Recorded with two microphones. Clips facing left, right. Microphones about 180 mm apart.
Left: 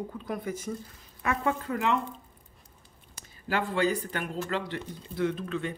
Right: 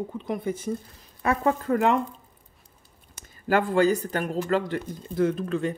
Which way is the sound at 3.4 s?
45° right (ahead or behind).